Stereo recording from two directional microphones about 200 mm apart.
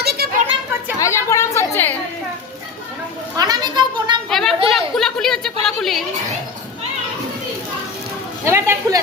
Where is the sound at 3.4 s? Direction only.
20° right (ahead or behind).